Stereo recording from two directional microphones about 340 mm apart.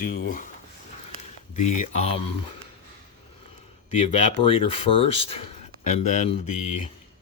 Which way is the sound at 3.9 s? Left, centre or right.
Centre.